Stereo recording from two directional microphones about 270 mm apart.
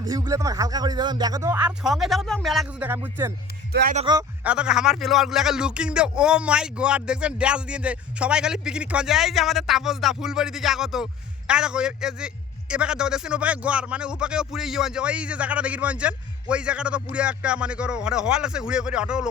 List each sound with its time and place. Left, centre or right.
0.0 s speech: centre
3.7 s speech: right
4.0 s speech: centre
4.4 s speech: centre